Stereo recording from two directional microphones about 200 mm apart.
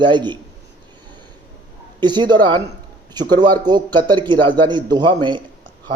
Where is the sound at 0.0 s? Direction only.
20° right (ahead or behind).